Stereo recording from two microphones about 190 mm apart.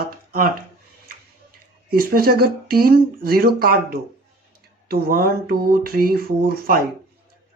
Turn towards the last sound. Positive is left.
turn(degrees=-50)  # may be behind; listen again after turning